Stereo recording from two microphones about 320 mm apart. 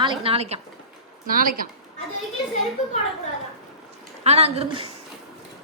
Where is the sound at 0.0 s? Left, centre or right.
Centre.